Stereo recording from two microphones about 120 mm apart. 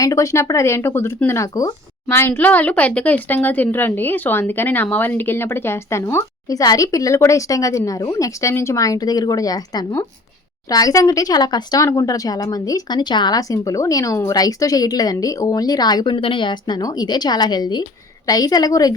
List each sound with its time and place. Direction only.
0.0 s a woman's voice: 30° left (ahead or behind)